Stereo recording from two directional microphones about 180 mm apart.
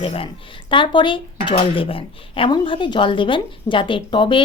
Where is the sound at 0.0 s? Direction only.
30° left (ahead or behind).